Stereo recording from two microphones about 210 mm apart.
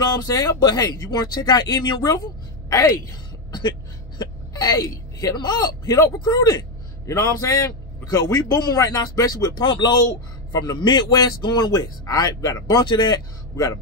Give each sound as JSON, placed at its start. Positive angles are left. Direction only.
{"t": 0.0, "sound": "a man's voice", "side_deg": 15}